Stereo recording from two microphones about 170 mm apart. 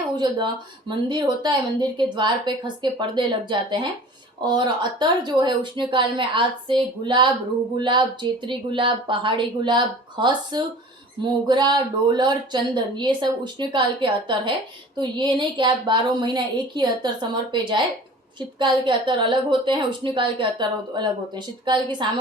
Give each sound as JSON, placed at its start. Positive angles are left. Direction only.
{"t": 0.1, "sound": "speech", "side_deg": -25}